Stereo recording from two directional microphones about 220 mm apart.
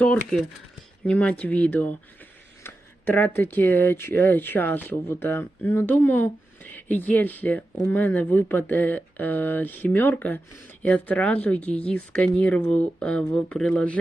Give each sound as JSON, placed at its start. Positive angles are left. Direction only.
{"t": 0.0, "sound": "speech", "side_deg": 5}